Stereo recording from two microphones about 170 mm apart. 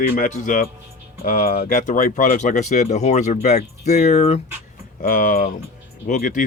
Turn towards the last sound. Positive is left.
turn(degrees=50)  # may be behind; listen again after turning